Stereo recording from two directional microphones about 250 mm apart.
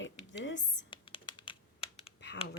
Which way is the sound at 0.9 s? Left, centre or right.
Left.